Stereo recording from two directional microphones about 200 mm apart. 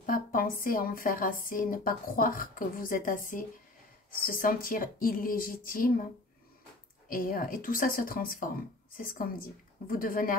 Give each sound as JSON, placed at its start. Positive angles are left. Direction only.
{"t": 0.0, "sound": "a sound", "side_deg": 45}
{"t": 0.7, "sound": "speech", "side_deg": 45}
{"t": 7.1, "sound": "speech", "side_deg": 45}